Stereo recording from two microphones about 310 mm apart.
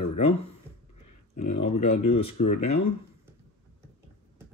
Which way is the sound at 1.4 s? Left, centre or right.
Left.